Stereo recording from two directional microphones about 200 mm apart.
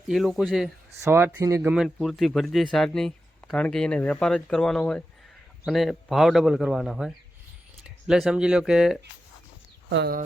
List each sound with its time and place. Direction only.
0.1 s speech: centre (ahead or behind)
1.7 s speech: centre (ahead or behind)
9.9 s speech: 55° right (ahead or behind)